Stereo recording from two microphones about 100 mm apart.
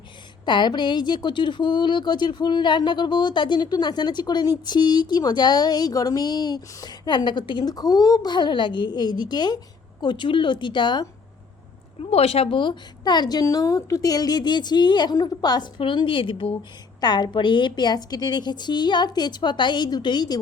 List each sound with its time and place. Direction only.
0.4 s a woman's voice: 50° left (ahead or behind)
12.1 s a woman's voice: 85° left; by 15.7 s 45° left (ahead or behind)
15.8 s speech: 55° left (ahead or behind)
17.0 s a woman's voice: 45° left (ahead or behind)